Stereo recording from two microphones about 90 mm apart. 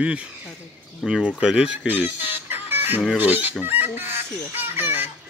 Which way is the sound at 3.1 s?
20° right (ahead or behind).